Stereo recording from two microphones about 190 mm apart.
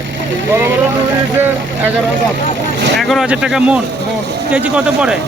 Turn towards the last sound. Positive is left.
turn(degrees=-5)  # may be behind; listen again after turning